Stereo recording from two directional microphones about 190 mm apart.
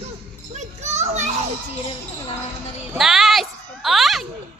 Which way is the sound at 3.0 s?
Centre (ahead or behind).